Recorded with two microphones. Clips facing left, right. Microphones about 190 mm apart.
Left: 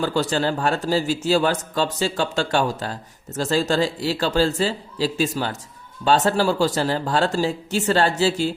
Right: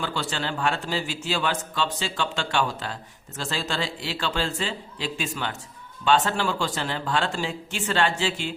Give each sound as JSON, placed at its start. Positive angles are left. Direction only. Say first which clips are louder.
{"t": 0.0, "sound": "a man's voice", "louder": "left 8 dB", "side_deg": 40}